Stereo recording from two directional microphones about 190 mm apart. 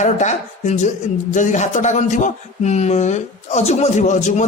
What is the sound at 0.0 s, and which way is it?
Speech, 40° left (ahead or behind).